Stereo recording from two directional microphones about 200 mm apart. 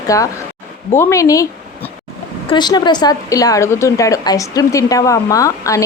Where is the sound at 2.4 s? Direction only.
20° left (ahead or behind).